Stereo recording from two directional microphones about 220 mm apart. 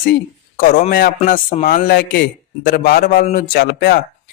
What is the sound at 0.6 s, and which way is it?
A man's voice, 40° left (ahead or behind).